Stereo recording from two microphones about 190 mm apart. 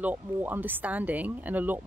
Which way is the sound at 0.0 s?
10° right (ahead or behind).